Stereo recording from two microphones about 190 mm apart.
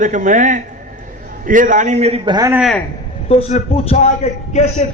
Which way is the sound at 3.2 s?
30° left (ahead or behind).